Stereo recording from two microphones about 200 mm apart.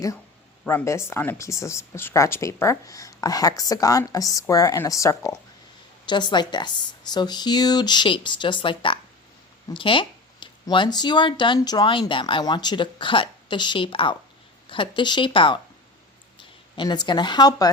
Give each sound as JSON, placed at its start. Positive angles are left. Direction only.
{"t": 0.6, "sound": "a woman's voice", "side_deg": 10}